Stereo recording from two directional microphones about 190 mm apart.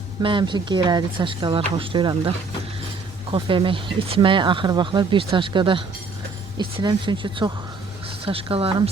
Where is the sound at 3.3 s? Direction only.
25° right (ahead or behind).